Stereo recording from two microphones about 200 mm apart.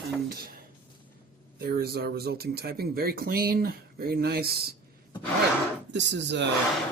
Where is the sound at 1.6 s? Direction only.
50° right (ahead or behind).